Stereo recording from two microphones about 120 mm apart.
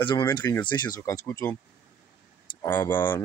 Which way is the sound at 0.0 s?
40° left (ahead or behind).